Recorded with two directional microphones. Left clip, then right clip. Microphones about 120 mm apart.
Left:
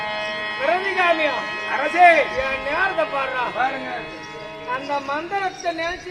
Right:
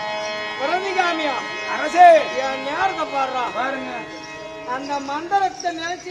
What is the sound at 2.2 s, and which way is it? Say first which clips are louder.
Speech: even; centre (ahead or behind).